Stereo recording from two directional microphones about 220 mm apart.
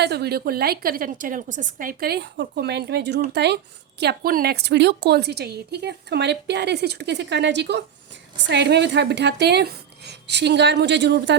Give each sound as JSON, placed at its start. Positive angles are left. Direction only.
{"t": 0.0, "sound": "a woman's voice", "side_deg": -45}